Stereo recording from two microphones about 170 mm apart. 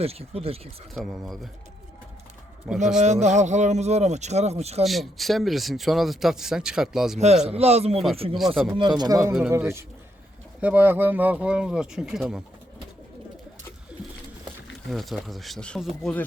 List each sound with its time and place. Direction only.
0.0 s speech: 35° right (ahead or behind)
0.9 s speech: centre (ahead or behind)
2.7 s speech: centre (ahead or behind)
3.0 s speech: 45° right (ahead or behind)
4.8 s speech: centre (ahead or behind)
7.4 s speech: 35° right (ahead or behind)
8.4 s speech: centre (ahead or behind)
8.8 s speech: 25° right (ahead or behind); by 12.4 s 5° right (ahead or behind)
14.9 s speech: centre (ahead or behind)